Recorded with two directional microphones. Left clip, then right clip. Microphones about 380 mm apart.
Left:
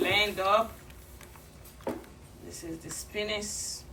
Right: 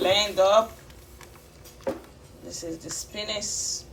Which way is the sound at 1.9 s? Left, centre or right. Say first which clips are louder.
Right 5 dB; centre.